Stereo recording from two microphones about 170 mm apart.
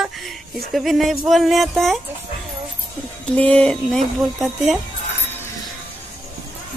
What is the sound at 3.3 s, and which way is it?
Speech, 5° left (ahead or behind).